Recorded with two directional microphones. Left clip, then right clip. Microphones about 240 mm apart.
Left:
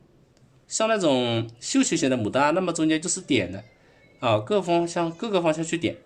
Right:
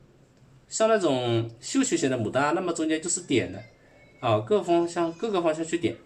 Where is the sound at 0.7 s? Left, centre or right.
Left.